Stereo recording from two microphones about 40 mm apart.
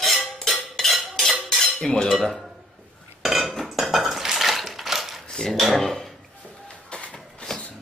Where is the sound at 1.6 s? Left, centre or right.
Centre.